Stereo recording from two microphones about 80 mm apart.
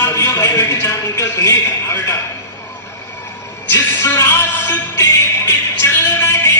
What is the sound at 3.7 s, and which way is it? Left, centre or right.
Music, left.